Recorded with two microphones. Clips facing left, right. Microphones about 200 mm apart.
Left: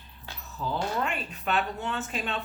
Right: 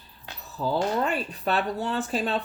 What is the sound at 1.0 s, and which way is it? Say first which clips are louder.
Speech: right 5 dB; 35° right (ahead or behind).